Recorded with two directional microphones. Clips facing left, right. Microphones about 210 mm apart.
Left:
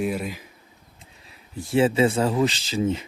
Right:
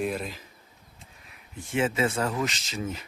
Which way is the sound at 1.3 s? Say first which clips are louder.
Left 7 dB; 35° left (ahead or behind).